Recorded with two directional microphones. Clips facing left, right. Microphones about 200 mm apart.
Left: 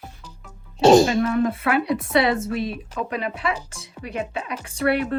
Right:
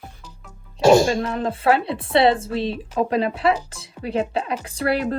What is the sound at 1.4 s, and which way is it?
Speech, 30° right (ahead or behind).